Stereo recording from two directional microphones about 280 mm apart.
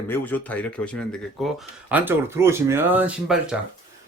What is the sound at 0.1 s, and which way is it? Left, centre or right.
Speech, centre.